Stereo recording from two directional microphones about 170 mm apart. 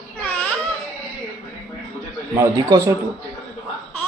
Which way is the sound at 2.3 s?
20° right (ahead or behind).